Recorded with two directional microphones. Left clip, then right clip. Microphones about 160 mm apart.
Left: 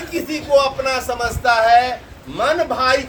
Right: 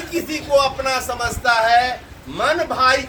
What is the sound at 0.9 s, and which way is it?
Speech, 30° left (ahead or behind).